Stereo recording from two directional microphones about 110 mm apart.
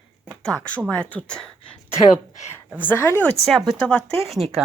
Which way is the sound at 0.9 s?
10° left (ahead or behind).